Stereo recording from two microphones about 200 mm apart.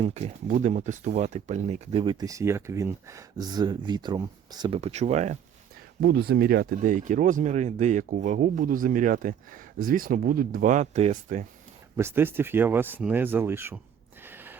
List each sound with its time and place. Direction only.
0.0 s speech: 30° right (ahead or behind)
2.2 s speech: 15° right (ahead or behind); by 5.4 s 35° right (ahead or behind)
6.0 s speech: 50° right (ahead or behind)
11.9 s speech: 10° right (ahead or behind)
14.3 s gasp: 10° right (ahead or behind)